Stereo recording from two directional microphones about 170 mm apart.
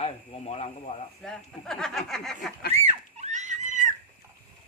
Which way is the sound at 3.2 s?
45° right (ahead or behind).